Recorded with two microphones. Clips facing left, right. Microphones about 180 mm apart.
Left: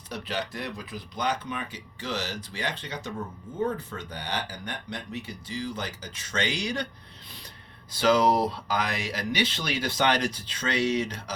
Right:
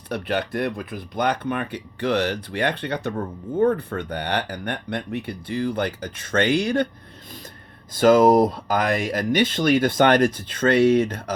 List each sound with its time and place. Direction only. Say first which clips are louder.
0.1 s speech: right 8 dB; 60° right (ahead or behind)
7.9 s speech: right 8 dB; 50° right (ahead or behind)